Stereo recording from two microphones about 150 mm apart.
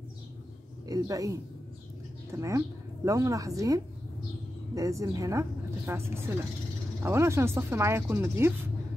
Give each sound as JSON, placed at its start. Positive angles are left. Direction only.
{"t": 0.8, "sound": "a woman's voice", "side_deg": -25}